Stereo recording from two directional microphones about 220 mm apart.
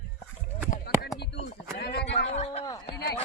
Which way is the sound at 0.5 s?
25° left (ahead or behind).